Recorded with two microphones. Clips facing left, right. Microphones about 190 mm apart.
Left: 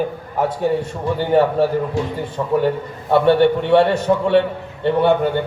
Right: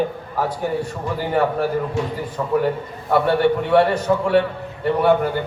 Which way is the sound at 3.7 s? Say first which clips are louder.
Left 2 dB; 25° left (ahead or behind).